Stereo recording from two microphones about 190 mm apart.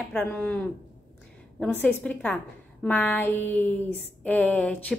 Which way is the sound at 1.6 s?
5° left (ahead or behind).